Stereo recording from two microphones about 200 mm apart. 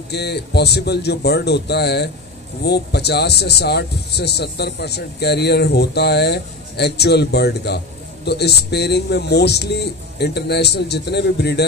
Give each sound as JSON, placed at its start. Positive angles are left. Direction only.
{"t": 0.1, "sound": "speech", "side_deg": 55}